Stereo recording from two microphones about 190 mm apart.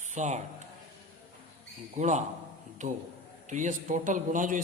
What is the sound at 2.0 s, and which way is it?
A man's voice, 40° right (ahead or behind).